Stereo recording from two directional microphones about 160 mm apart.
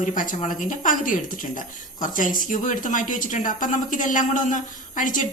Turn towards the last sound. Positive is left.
turn(degrees=55)  # may be behind; listen again after turning